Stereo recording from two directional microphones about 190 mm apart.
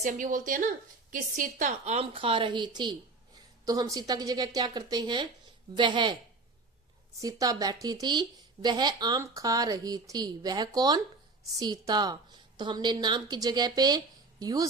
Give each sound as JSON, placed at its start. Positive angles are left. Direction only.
{"t": 0.0, "sound": "speech", "side_deg": -45}
{"t": 7.2, "sound": "speech", "side_deg": -20}